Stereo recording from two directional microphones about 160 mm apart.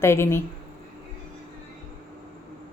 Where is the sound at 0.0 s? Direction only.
15° left (ahead or behind).